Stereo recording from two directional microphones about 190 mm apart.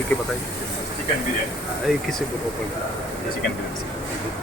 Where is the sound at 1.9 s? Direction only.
Centre (ahead or behind).